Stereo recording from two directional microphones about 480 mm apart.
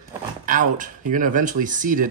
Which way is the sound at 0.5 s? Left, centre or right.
Centre.